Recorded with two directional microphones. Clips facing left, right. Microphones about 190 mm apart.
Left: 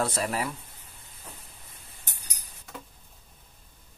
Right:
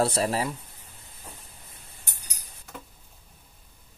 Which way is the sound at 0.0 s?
30° right (ahead or behind).